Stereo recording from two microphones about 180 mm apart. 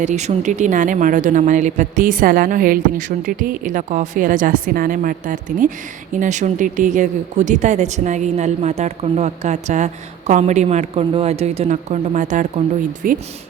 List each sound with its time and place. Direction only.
0.0 s a woman's voice: 40° right (ahead or behind)